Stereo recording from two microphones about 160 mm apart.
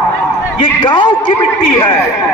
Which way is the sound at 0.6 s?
30° left (ahead or behind).